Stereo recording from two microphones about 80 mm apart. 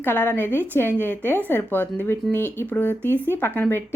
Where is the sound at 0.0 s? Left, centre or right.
Left.